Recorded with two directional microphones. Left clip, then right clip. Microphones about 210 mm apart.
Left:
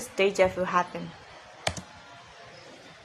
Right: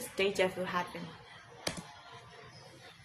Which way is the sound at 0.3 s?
15° left (ahead or behind).